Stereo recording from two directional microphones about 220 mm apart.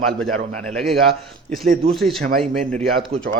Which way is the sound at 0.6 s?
5° left (ahead or behind).